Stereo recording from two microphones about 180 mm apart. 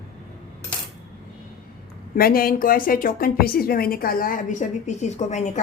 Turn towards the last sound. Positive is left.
turn(degrees=40)  # may be behind; listen again after turning